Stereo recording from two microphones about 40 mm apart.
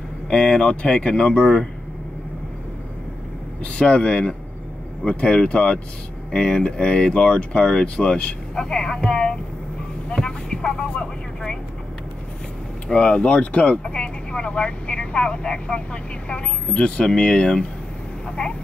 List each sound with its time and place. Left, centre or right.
0.3 s speech: centre
3.6 s speech: left
10.5 s speech: centre
12.8 s speech: left